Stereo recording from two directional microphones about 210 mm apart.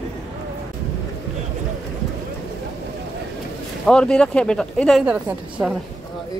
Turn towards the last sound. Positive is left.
turn(degrees=-5)  # may be behind; listen again after turning